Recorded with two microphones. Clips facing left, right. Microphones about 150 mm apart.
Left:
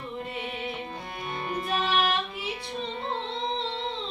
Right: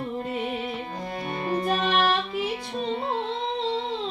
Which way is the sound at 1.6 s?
40° right (ahead or behind).